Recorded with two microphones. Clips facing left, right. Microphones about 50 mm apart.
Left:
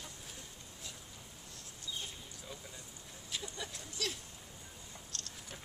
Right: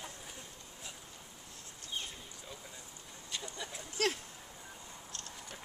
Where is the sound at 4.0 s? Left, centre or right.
Right.